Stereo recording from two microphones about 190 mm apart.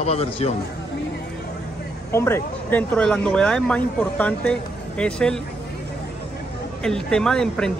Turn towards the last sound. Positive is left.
turn(degrees=5)  # may be behind; listen again after turning